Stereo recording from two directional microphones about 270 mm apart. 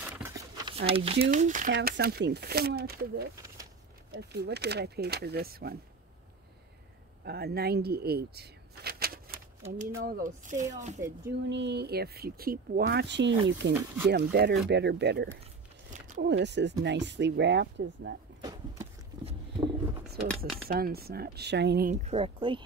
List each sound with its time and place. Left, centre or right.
0.8 s speech: right
7.2 s speech: right
11.4 s speech: right
19.2 s a sound: centre
20.2 s speech: centre
20.6 s speech: right; by 22.6 s centre